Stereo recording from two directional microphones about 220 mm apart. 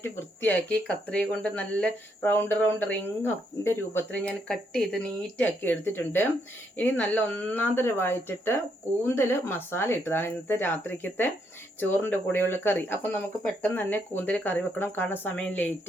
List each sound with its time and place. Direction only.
0.0 s speech: 5° left (ahead or behind)